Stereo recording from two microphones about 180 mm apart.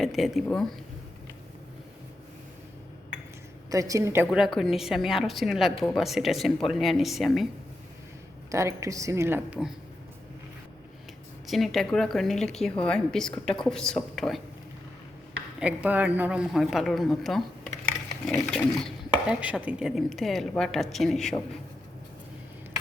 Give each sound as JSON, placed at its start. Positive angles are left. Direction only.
{"t": 0.0, "sound": "a woman's voice", "side_deg": 0}
{"t": 3.7, "sound": "speech", "side_deg": -20}
{"t": 4.4, "sound": "a woman's voice", "side_deg": 0}
{"t": 8.4, "sound": "speech", "side_deg": -15}
{"t": 11.4, "sound": "a woman's voice", "side_deg": 0}
{"t": 15.6, "sound": "a woman's voice", "side_deg": -10}
{"t": 19.1, "sound": "a woman's voice", "side_deg": -5}